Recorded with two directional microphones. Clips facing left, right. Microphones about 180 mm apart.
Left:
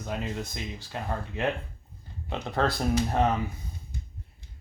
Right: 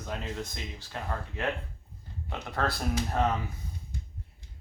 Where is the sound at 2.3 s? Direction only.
25° left (ahead or behind).